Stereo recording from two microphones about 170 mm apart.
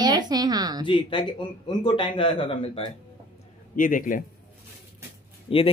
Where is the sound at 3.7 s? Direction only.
50° left (ahead or behind).